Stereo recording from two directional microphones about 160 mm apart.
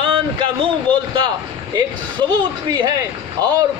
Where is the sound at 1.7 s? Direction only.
25° right (ahead or behind).